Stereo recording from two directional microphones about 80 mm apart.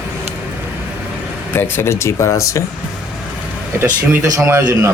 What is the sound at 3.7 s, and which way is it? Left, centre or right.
Speech, right.